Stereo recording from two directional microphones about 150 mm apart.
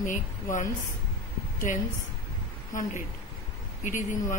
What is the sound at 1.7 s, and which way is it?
Speech, 55° left (ahead or behind).